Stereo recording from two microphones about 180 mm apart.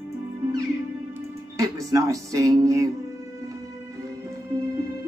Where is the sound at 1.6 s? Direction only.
20° right (ahead or behind).